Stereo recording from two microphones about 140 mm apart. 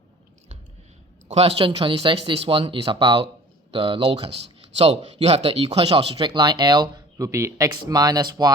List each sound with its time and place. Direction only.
1.3 s speech: 45° right (ahead or behind); by 8.5 s 30° right (ahead or behind)